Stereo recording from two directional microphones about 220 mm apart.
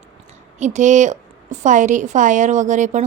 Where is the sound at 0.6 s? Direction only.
35° right (ahead or behind).